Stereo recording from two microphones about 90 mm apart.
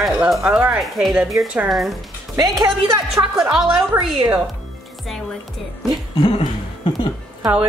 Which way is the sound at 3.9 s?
25° right (ahead or behind).